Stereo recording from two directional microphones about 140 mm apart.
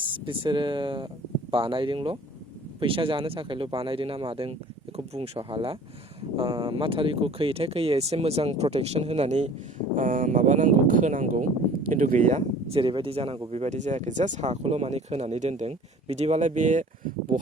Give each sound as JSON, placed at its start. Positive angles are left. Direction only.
{"t": 0.0, "sound": "speech", "side_deg": -35}
{"t": 9.9, "sound": "speech", "side_deg": -70}